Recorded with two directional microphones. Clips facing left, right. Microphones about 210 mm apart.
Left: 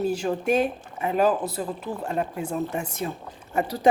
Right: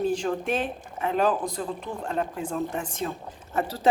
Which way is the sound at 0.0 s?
10° left (ahead or behind).